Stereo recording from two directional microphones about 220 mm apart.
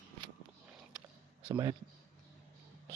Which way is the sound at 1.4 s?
20° right (ahead or behind).